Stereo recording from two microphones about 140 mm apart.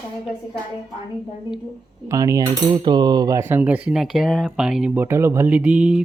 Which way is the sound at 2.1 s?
25° right (ahead or behind).